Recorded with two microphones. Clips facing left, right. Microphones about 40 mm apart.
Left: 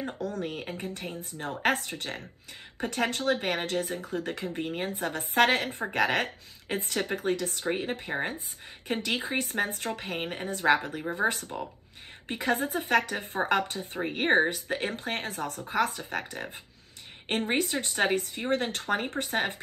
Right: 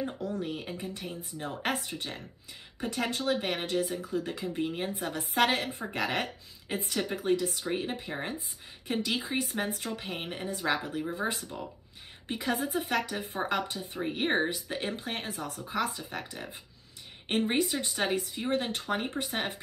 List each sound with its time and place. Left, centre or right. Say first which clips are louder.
0.4 s a woman's voice: left 1 dB; left
7.7 s a woman's voice: left 2 dB; left
10.1 s a woman's voice: left 4 dB; left
10.4 s speech: left 6 dB; left
14.1 s a woman's voice: left 5 dB; left
17.6 s speech: left 2 dB; left